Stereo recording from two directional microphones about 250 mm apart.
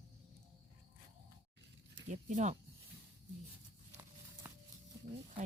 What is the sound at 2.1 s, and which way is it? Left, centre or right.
Speech, right.